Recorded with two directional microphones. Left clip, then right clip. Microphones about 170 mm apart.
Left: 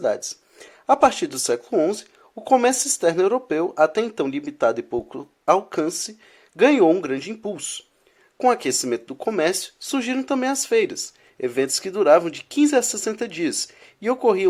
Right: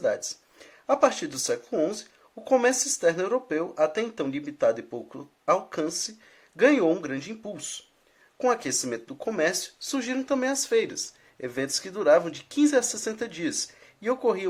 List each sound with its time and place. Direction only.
0.0 s speech: 25° left (ahead or behind)